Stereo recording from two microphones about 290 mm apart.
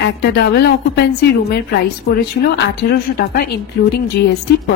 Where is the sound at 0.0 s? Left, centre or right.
Left.